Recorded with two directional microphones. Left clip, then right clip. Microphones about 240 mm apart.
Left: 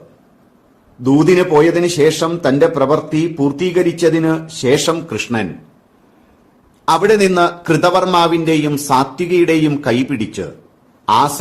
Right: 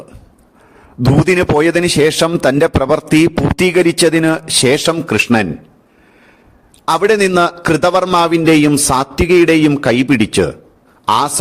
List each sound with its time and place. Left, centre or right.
1.2 s a man's voice: right
6.8 s a man's voice: right